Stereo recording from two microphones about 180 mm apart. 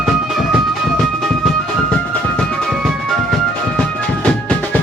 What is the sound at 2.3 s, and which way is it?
Music, centre (ahead or behind).